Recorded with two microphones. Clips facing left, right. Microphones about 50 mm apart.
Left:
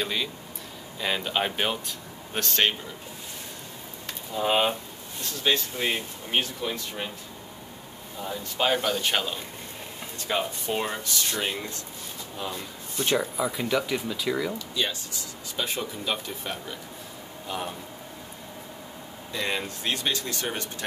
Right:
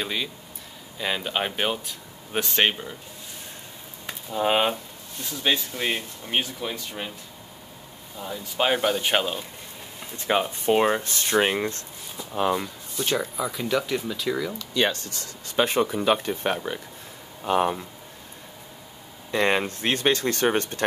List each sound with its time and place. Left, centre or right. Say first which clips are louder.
0.0 s speech: even; centre
4.3 s speech: right 2 dB; centre
8.5 s speech: right 2 dB; centre; by 11.8 s right
12.4 s speech: right 11 dB; right
13.0 s speech: left 1 dB; centre
14.7 s speech: right 6 dB; right
19.3 s speech: right 7 dB; right